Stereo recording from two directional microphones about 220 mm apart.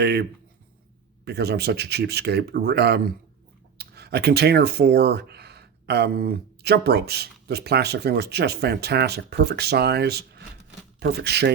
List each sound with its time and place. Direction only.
0.0 s speech: 50° right (ahead or behind)